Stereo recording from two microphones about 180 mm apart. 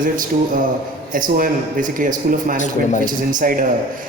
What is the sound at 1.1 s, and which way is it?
A woman's voice, 50° right (ahead or behind).